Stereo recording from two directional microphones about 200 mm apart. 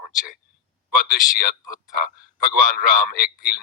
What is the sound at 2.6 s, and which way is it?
Speech, 45° left (ahead or behind).